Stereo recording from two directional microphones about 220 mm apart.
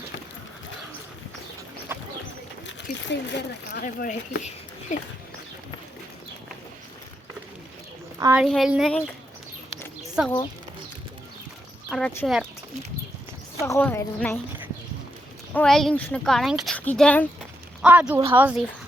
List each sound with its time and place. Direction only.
1.9 s bird: 10° right (ahead or behind)
3.1 s speech: 50° left (ahead or behind)
3.8 s speech: 40° left (ahead or behind)
8.2 s speech: 10° right (ahead or behind)
10.2 s speech: 5° right (ahead or behind)
11.9 s speech: 5° left (ahead or behind)
13.7 s a woman's voice: 10° left (ahead or behind)
15.5 s speech: centre (ahead or behind)
17.8 s speech: 5° right (ahead or behind)